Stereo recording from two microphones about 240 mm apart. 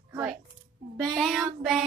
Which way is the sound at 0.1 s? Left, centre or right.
Centre.